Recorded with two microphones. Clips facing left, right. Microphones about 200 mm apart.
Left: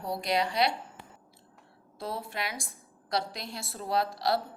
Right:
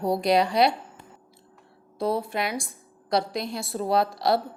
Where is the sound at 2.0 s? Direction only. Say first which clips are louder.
Right 11 dB; 70° right (ahead or behind).